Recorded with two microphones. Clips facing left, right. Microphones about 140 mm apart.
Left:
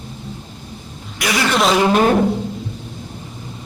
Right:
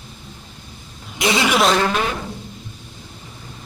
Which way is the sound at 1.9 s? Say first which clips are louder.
Left 8 dB; 40° left (ahead or behind).